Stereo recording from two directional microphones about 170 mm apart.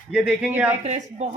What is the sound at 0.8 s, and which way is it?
Speech, 45° right (ahead or behind).